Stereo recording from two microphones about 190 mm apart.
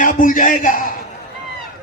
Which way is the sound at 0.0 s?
45° left (ahead or behind).